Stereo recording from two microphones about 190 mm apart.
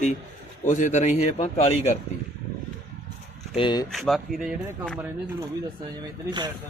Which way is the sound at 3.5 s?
25° left (ahead or behind).